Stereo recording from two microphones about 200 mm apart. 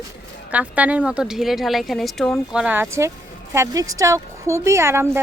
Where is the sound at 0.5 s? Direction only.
5° right (ahead or behind).